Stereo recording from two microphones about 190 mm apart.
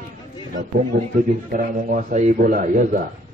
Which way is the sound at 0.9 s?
35° right (ahead or behind).